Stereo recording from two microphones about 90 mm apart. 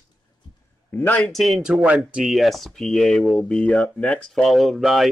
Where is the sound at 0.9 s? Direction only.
20° left (ahead or behind).